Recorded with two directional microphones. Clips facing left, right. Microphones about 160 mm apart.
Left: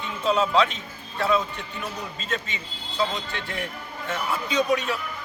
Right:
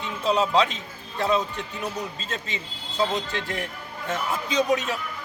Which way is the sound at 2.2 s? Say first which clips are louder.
Left 2 dB; 35° right (ahead or behind).